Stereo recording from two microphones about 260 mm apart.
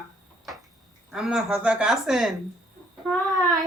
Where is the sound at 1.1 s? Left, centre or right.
Centre.